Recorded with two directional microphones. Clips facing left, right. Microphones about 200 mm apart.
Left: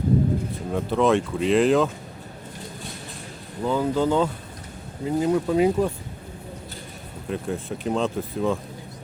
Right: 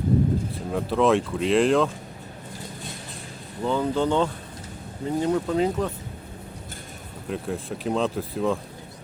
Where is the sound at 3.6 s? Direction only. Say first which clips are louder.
Left 1 dB; 5° left (ahead or behind).